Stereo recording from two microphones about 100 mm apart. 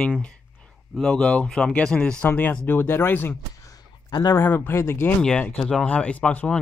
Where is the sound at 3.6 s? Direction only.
35° left (ahead or behind).